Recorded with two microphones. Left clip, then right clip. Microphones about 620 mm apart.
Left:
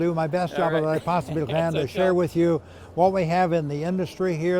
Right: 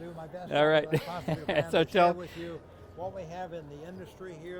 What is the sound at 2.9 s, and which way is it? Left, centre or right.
Speech, left.